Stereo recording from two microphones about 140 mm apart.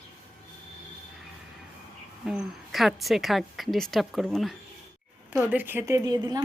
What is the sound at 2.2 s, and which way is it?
A woman's voice, centre (ahead or behind).